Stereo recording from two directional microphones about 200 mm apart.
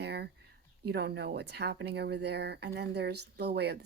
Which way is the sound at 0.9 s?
55° right (ahead or behind).